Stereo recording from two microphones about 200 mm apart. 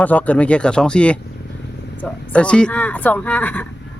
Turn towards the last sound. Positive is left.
turn(degrees=5)  # may be behind; listen again after turning